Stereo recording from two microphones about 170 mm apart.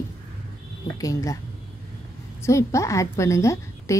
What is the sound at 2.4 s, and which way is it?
A woman's voice, 15° left (ahead or behind).